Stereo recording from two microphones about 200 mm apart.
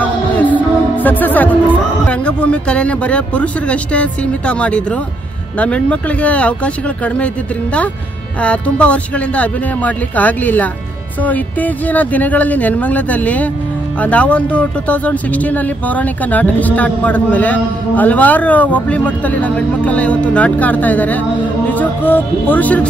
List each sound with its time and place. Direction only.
0.0 s music: 10° left (ahead or behind)
2.0 s speech: 5° left (ahead or behind)
8.4 s speech: 5° left (ahead or behind)